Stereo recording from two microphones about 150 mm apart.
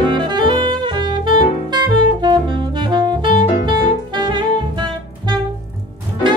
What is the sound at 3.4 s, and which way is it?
Music, 30° right (ahead or behind).